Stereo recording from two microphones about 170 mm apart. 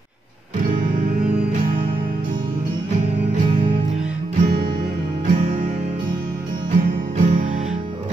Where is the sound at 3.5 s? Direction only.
30° right (ahead or behind).